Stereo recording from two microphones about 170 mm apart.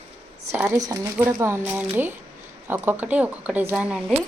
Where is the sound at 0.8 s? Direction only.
20° right (ahead or behind).